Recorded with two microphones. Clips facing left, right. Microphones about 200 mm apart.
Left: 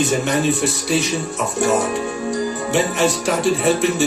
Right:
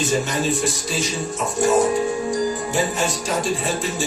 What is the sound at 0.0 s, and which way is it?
Speech, 60° left (ahead or behind).